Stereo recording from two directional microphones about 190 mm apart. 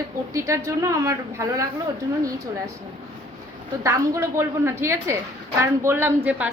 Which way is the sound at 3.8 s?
15° right (ahead or behind).